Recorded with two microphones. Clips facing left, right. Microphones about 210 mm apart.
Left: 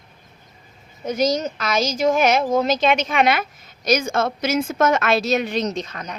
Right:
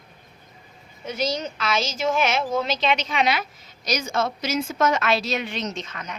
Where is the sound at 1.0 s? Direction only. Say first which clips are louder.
Left 6 dB; 45° left (ahead or behind).